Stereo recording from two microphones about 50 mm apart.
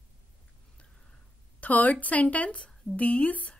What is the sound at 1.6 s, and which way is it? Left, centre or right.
A woman's voice, left.